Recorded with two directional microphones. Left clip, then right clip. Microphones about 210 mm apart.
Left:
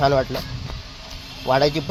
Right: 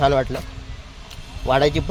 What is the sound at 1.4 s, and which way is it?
Speech, 10° right (ahead or behind).